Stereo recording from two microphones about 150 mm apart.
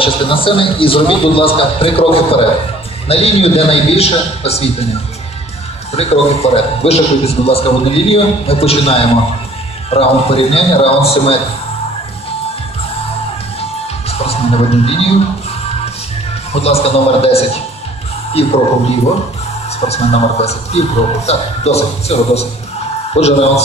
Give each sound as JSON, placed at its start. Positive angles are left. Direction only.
{"t": 0.0, "sound": "a man's voice", "side_deg": 35}
{"t": 5.9, "sound": "a man's voice", "side_deg": 45}
{"t": 14.1, "sound": "music", "side_deg": 40}
{"t": 16.5, "sound": "a man's voice", "side_deg": 45}
{"t": 19.8, "sound": "a man's voice", "side_deg": 45}